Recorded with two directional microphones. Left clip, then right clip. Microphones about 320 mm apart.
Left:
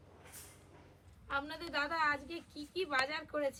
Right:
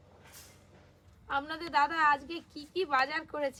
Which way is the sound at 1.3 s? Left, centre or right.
Centre.